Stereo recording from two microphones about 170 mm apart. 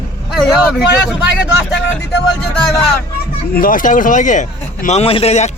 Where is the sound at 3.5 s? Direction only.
55° left (ahead or behind); by 5.5 s 40° left (ahead or behind).